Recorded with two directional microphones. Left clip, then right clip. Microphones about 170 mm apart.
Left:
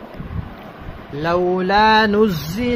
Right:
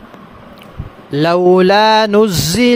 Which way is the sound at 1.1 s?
60° right (ahead or behind).